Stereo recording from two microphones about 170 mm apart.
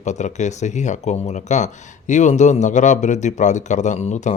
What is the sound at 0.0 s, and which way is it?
Speech, 45° left (ahead or behind).